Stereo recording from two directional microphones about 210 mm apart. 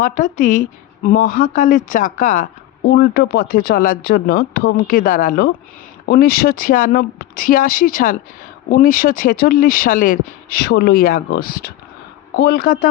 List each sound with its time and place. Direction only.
0.0 s a woman's voice: 40° left (ahead or behind)